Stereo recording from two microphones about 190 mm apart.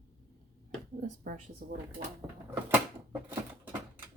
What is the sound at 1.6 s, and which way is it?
Speech, 50° right (ahead or behind).